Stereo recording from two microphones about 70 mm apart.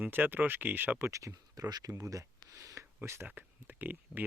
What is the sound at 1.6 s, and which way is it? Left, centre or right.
Speech, right.